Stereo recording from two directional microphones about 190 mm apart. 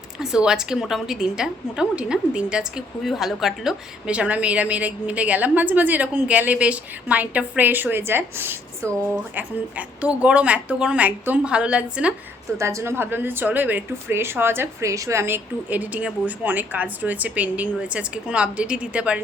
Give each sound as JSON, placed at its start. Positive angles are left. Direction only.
{"t": 0.2, "sound": "a woman's voice", "side_deg": -5}